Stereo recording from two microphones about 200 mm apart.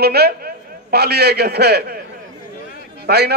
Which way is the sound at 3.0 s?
55° right (ahead or behind).